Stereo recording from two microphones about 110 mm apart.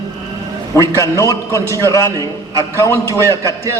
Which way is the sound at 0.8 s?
30° left (ahead or behind).